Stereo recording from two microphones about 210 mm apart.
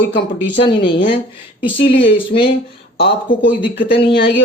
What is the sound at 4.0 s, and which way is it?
Speech, 25° left (ahead or behind).